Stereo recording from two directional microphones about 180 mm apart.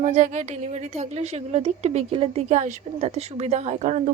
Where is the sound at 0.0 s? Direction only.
40° right (ahead or behind).